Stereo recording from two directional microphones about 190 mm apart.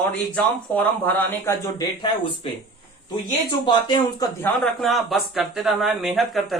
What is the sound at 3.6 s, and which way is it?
Speech, 25° left (ahead or behind).